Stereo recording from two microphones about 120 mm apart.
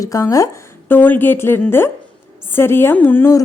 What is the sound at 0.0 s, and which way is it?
Speech, 30° left (ahead or behind).